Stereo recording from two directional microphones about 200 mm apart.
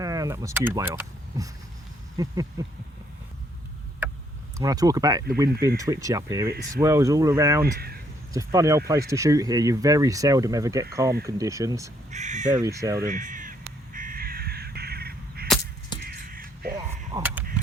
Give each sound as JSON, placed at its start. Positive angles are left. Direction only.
{"t": 0.0, "sound": "speech", "side_deg": -15}
{"t": 4.0, "sound": "a sound", "side_deg": -10}
{"t": 4.5, "sound": "speech", "side_deg": -15}
{"t": 12.1, "sound": "speech", "side_deg": -35}
{"t": 12.6, "sound": "speech", "side_deg": -15}
{"t": 13.1, "sound": "speech", "side_deg": -40}
{"t": 13.9, "sound": "crow", "side_deg": -45}
{"t": 16.0, "sound": "caw", "side_deg": -50}
{"t": 16.7, "sound": "a sound", "side_deg": -20}